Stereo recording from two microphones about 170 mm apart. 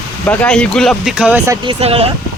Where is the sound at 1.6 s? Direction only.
35° right (ahead or behind).